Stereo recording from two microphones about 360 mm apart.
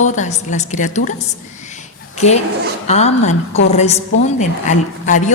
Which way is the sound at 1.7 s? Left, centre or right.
Centre.